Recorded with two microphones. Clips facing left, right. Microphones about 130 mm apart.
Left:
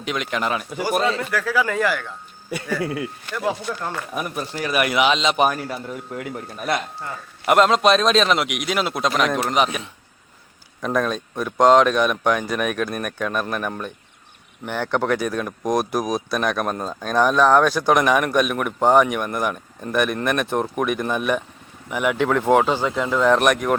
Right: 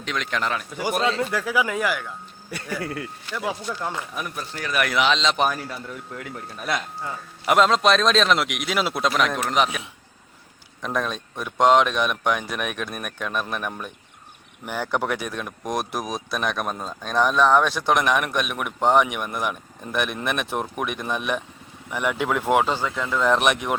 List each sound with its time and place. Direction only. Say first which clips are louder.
0.0 s a man's voice: left 2 dB; 5° left (ahead or behind)
1.2 s speech: left 1 dB; 20° right (ahead or behind)
2.8 s speech: left 5 dB; 5° left (ahead or behind)
4.4 s a man's voice: left 3 dB; 10° left (ahead or behind)
10.8 s speech: left 5 dB; centre (ahead or behind)
22.8 s speech: left 4 dB; 20° left (ahead or behind)
23.2 s speech: left 3 dB; centre (ahead or behind)